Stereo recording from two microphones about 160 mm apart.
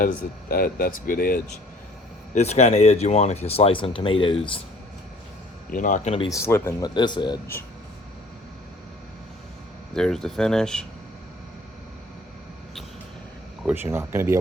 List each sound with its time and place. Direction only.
0.0 s speech: 70° left (ahead or behind)
2.3 s speech: 45° left (ahead or behind)
5.7 s speech: 55° left (ahead or behind)
6.3 s speech: 15° left (ahead or behind)
9.9 s speech: 5° left (ahead or behind)
13.7 s speech: 15° right (ahead or behind)